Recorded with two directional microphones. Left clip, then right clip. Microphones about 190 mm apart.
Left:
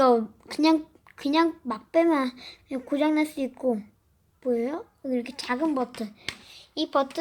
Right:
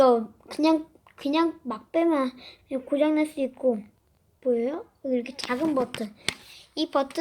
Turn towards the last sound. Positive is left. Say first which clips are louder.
# left 1 dB
turn(degrees=-10)  # may be behind; listen again after turning